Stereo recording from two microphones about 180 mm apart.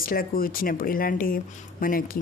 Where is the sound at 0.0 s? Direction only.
55° left (ahead or behind).